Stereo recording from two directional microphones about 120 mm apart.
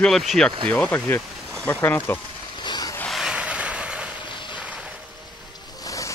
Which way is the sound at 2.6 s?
35° left (ahead or behind).